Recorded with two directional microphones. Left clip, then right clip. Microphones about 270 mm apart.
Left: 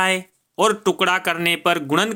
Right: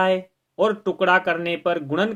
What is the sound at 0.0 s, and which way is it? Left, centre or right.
Speech, left.